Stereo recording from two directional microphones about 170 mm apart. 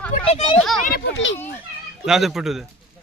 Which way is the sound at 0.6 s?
Centre (ahead or behind).